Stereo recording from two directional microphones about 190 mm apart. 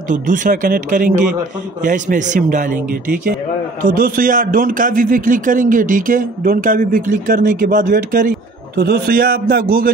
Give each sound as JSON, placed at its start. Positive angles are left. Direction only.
{"t": 0.1, "sound": "a man's voice", "side_deg": -45}